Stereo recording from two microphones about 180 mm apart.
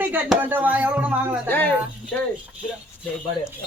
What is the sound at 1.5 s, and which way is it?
Speech, 10° left (ahead or behind).